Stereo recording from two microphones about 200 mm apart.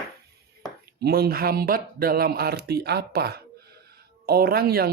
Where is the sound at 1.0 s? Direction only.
50° right (ahead or behind).